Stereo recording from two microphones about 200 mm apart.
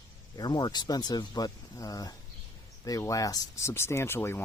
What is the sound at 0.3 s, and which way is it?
Speech, 20° left (ahead or behind).